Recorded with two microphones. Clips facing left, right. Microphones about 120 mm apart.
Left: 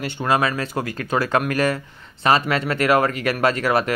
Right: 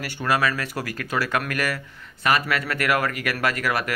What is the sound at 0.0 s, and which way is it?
Speech, 25° left (ahead or behind).